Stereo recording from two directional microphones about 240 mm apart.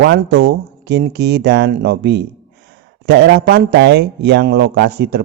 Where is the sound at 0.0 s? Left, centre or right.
Right.